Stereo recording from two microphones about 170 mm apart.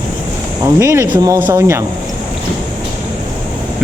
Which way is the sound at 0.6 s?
15° right (ahead or behind).